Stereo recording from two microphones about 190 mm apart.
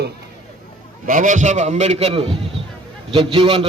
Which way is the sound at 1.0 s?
45° right (ahead or behind).